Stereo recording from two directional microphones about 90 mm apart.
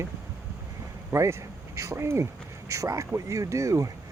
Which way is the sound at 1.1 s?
35° right (ahead or behind).